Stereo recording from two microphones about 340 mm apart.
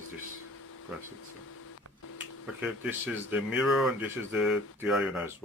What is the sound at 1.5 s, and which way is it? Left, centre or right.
Printer, left.